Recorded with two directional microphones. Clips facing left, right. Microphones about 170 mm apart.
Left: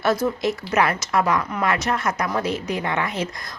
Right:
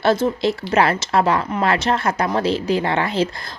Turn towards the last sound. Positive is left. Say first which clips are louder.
# right 5 dB
turn(degrees=-30)  # may be behind; listen again after turning